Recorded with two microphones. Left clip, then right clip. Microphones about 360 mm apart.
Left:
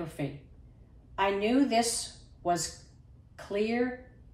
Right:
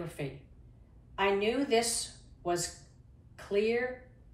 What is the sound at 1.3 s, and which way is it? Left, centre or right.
Speech, centre.